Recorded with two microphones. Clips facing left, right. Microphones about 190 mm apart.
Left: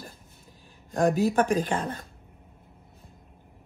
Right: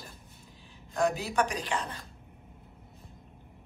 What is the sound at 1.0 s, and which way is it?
Speech, 50° left (ahead or behind).